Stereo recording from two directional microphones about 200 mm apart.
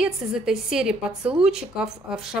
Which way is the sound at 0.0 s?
Centre (ahead or behind).